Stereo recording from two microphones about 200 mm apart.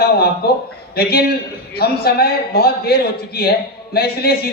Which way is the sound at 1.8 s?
50° left (ahead or behind).